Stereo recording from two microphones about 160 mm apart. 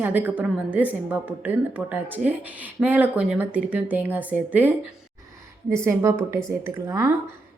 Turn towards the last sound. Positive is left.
turn(degrees=-20)  # may be behind; listen again after turning